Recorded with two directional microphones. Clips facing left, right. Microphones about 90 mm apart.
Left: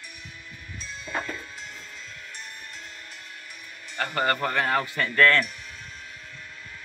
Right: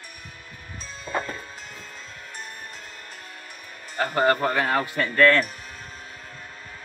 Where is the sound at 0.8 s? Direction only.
40° right (ahead or behind).